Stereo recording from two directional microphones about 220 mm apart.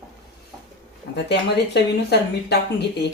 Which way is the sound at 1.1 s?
50° left (ahead or behind).